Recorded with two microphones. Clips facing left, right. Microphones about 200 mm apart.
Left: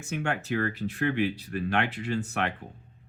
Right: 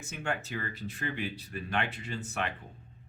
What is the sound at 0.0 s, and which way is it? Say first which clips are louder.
Speech: left 5 dB; 65° left (ahead or behind).